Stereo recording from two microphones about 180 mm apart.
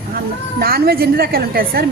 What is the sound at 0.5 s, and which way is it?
A woman's voice, 60° right (ahead or behind).